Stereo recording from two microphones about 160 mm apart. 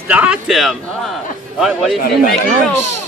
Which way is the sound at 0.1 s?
10° right (ahead or behind).